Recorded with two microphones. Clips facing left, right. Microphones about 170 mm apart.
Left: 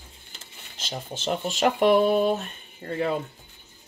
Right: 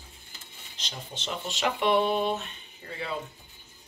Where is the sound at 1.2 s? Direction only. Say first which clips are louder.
Left 7 dB; 45° left (ahead or behind).